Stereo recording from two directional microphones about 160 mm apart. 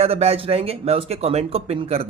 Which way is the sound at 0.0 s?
40° right (ahead or behind).